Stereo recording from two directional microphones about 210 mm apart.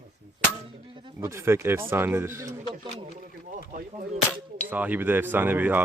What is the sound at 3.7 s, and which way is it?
Speech, 35° right (ahead or behind).